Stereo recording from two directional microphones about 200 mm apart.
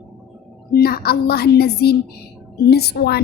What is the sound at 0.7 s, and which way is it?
A woman's voice, 50° left (ahead or behind).